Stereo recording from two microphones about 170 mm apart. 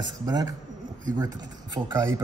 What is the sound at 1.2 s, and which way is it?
Speech, 25° right (ahead or behind).